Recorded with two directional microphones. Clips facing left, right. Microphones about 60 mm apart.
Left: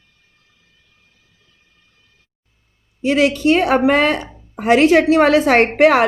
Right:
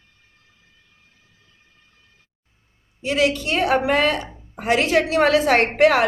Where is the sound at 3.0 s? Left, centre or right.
Left.